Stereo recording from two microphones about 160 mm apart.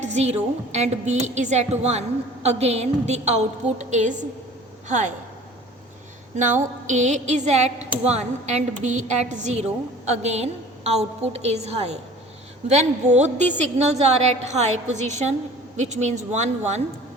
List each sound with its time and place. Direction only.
0.0 s a woman's voice: 45° right (ahead or behind)
6.3 s a woman's voice: 50° right (ahead or behind)